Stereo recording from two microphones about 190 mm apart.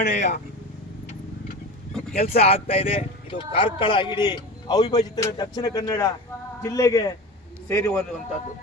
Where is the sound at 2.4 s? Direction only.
30° left (ahead or behind); by 8.1 s 10° left (ahead or behind).